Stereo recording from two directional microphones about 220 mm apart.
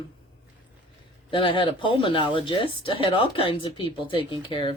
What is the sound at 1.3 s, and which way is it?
Speech, 25° left (ahead or behind).